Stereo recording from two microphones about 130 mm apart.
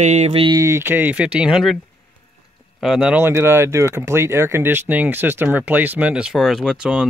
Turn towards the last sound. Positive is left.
turn(degrees=-5)  # may be behind; listen again after turning